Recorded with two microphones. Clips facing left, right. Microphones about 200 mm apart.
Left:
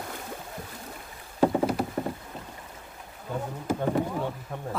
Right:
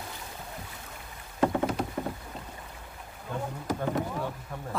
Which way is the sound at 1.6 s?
5° left (ahead or behind).